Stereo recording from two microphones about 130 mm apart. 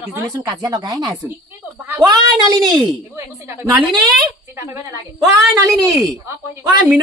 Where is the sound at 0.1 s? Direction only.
30° right (ahead or behind).